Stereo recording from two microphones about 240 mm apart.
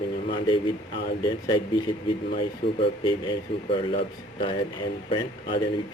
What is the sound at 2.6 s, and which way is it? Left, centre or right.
Speech, left.